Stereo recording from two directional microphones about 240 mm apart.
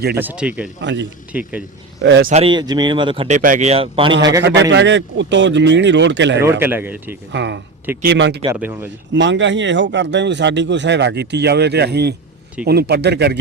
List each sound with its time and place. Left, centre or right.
0.2 s speech: centre
0.8 s speech: right
1.3 s speech: centre
2.0 s speech: right
2.3 s speech: right
4.7 s speech: right
6.4 s speech: centre
7.3 s speech: right
8.5 s speech: centre
9.1 s speech: right